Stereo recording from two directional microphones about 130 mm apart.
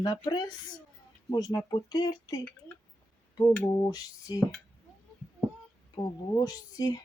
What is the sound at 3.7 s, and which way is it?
Speech, 30° left (ahead or behind).